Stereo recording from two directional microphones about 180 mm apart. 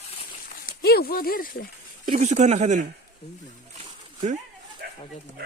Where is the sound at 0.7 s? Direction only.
60° left (ahead or behind).